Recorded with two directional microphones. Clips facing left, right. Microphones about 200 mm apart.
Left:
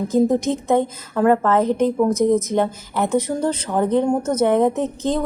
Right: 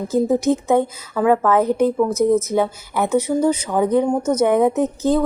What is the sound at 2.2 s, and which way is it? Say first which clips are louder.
A woman's voice: right 1 dB; 10° right (ahead or behind).